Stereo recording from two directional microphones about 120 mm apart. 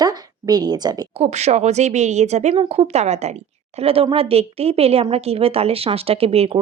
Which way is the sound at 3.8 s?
50° right (ahead or behind).